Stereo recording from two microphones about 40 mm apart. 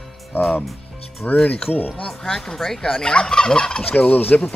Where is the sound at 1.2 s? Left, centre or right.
Left.